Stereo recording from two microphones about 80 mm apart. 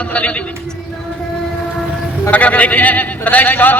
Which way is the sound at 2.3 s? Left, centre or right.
Centre.